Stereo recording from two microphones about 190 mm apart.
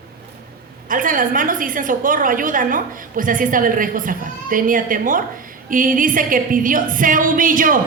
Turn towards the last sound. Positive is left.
turn(degrees=-45)  # may be behind; listen again after turning